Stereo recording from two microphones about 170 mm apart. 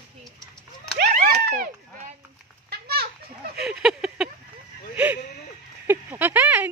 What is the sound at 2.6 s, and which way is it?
Children playing, 70° right (ahead or behind).